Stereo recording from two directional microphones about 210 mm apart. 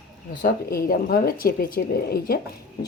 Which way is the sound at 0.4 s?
45° left (ahead or behind).